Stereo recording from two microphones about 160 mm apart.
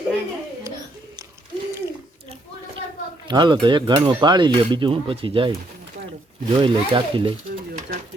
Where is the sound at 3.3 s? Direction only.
30° right (ahead or behind).